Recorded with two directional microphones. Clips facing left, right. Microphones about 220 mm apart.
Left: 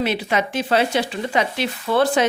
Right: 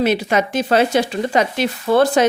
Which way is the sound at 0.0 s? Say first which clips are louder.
Right 5 dB; 45° right (ahead or behind).